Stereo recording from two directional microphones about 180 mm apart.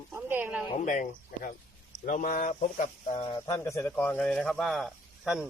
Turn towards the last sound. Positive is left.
turn(degrees=0)  # may be behind; listen again after turning